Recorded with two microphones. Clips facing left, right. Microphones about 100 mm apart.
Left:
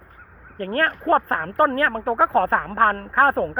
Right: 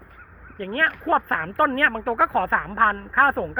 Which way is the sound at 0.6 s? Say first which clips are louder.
Left 2 dB; 45° left (ahead or behind).